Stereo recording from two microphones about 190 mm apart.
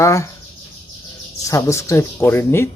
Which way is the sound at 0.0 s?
15° left (ahead or behind).